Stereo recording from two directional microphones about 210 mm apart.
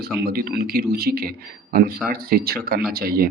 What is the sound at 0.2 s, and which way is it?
A man's voice, 45° right (ahead or behind).